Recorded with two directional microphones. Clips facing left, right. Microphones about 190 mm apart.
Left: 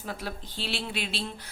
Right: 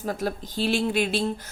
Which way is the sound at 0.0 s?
45° right (ahead or behind).